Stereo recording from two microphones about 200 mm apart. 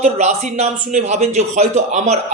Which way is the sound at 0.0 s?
35° right (ahead or behind).